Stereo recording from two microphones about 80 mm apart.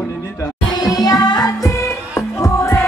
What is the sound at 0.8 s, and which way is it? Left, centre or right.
Music, left.